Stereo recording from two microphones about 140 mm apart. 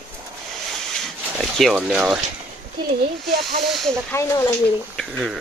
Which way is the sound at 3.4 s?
Centre (ahead or behind).